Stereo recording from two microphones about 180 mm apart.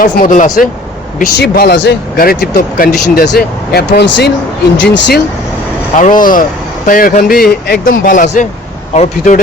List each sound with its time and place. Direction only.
0.0 s speech: 50° left (ahead or behind)
1.2 s speech: 60° left (ahead or behind)
6.0 s speech: 50° left (ahead or behind)